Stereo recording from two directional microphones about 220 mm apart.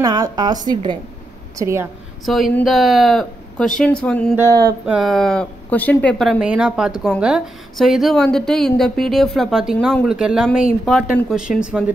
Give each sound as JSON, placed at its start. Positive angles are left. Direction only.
{"t": 0.0, "sound": "a woman's voice", "side_deg": -20}
{"t": 2.2, "sound": "a woman's voice", "side_deg": 0}